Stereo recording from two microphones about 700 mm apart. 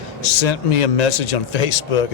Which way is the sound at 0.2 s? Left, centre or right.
Left.